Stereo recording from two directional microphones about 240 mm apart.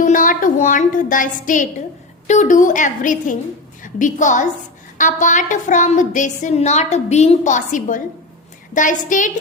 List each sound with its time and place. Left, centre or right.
0.0 s a woman's voice: left